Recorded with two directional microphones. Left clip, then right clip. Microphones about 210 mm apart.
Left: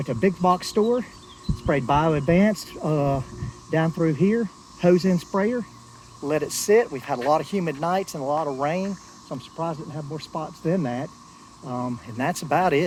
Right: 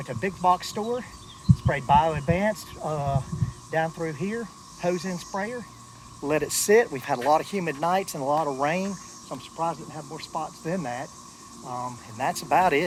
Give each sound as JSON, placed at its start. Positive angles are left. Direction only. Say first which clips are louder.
{"t": 0.0, "sound": "speech", "louder": "left 3 dB", "side_deg": -45}
{"t": 6.2, "sound": "speech", "louder": "left 1 dB", "side_deg": -10}
{"t": 8.6, "sound": "speech", "louder": "left 1 dB", "side_deg": -15}
{"t": 9.6, "sound": "speech", "louder": "right 1 dB", "side_deg": -30}